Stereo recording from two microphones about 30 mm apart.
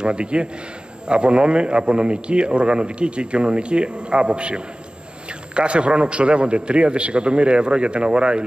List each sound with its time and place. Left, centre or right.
0.0 s a man's voice: right